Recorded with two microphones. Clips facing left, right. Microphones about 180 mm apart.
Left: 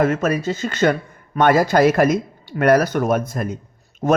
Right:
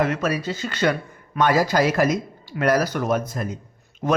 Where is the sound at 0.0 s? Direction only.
50° left (ahead or behind).